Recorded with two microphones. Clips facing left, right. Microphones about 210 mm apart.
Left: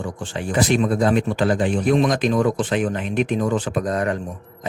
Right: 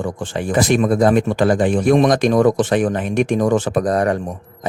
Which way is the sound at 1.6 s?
60° right (ahead or behind).